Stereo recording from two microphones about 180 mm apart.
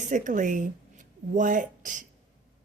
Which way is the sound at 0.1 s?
45° right (ahead or behind).